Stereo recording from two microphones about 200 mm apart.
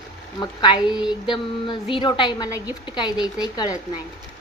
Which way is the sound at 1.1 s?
25° left (ahead or behind).